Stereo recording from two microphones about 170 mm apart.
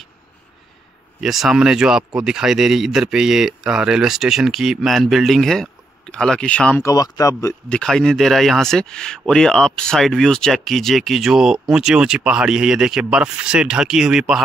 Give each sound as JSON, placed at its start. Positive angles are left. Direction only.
{"t": 1.2, "sound": "speech", "side_deg": 0}
{"t": 6.9, "sound": "speech", "side_deg": 20}
{"t": 7.7, "sound": "speech", "side_deg": 5}